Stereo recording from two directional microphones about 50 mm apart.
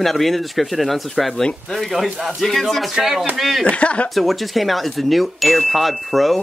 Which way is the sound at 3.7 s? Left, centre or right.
Left.